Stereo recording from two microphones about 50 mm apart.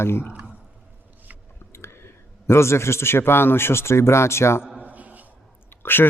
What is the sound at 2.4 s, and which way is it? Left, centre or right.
Speech, left.